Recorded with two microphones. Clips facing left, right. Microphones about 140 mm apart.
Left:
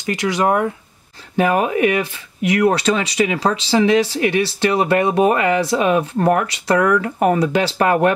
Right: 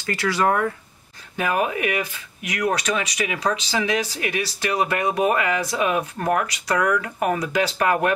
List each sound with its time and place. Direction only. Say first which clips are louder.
0.0 s speech: left 3 dB; 20° left (ahead or behind)